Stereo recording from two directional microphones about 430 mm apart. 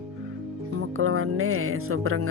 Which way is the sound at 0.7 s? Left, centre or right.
Right.